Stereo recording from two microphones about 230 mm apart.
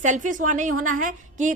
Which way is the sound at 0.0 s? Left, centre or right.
Right.